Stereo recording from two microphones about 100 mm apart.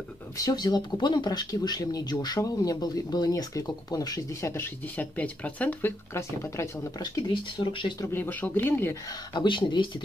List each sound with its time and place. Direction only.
0.4 s speech: 40° left (ahead or behind)
4.9 s speech: 15° left (ahead or behind)
7.5 s speech: 55° left (ahead or behind)
8.1 s speech: 15° left (ahead or behind)
9.3 s speech: 50° left (ahead or behind)